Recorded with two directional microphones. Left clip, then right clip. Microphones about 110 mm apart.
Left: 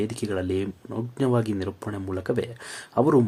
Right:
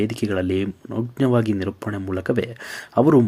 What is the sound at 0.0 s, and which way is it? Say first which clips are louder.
Speech: right 5 dB; 25° right (ahead or behind).